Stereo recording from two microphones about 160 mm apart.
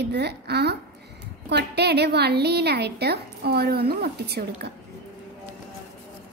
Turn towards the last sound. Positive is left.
turn(degrees=-80)